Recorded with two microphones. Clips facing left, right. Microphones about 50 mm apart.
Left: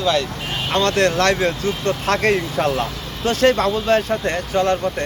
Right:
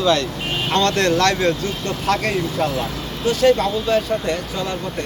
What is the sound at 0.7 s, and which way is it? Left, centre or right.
Speech, left.